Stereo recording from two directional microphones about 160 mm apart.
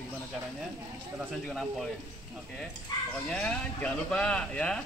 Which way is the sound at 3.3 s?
5° left (ahead or behind).